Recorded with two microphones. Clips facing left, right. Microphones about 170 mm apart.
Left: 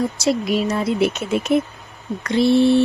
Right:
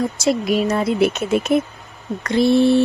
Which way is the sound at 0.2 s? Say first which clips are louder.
Right 3 dB; 50° right (ahead or behind).